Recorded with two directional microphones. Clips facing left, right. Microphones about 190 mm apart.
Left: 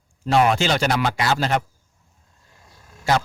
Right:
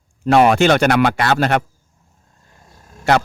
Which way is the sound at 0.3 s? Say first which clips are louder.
Right 6 dB; 65° right (ahead or behind).